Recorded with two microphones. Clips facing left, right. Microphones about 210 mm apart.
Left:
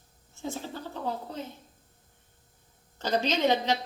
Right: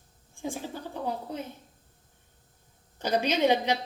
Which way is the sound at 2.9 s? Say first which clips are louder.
Right 1 dB; 10° right (ahead or behind).